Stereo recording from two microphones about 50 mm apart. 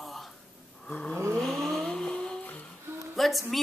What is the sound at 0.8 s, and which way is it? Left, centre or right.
Snoring, centre.